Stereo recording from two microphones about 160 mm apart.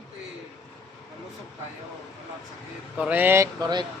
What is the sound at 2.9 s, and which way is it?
Speech, 10° right (ahead or behind).